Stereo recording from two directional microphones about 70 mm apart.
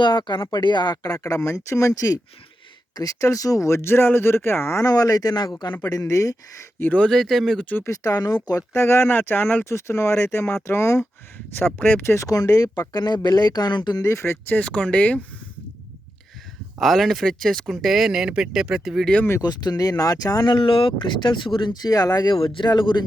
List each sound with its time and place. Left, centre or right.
0.0 s speech: left
4.9 s speech: left
5.8 s speech: left
6.9 s speech: centre
7.9 s speech: left
8.7 s speech: left
9.6 s speech: left
12.3 s speech: left
14.0 s speech: left
14.6 s speech: centre
16.8 s speech: centre
19.4 s speech: left
21.1 s speech: left